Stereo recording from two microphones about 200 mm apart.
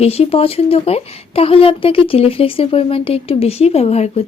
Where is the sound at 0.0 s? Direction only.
30° left (ahead or behind).